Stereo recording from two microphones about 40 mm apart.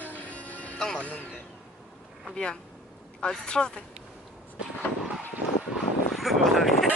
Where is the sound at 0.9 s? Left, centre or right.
Left.